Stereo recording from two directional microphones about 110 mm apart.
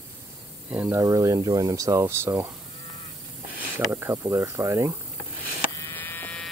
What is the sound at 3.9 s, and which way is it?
Speech, 25° right (ahead or behind).